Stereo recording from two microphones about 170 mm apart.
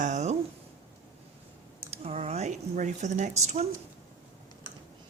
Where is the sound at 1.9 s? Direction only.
40° right (ahead or behind).